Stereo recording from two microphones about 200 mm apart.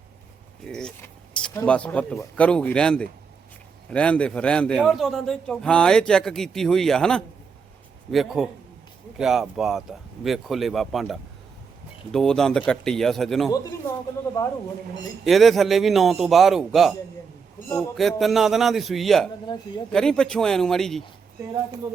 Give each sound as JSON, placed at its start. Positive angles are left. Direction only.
{"t": 0.6, "sound": "keys jangling", "side_deg": 5}
{"t": 1.6, "sound": "a man's voice", "side_deg": 5}
{"t": 15.2, "sound": "a man's voice", "side_deg": 0}
{"t": 19.5, "sound": "speech", "side_deg": 25}
{"t": 19.9, "sound": "a man's voice", "side_deg": 5}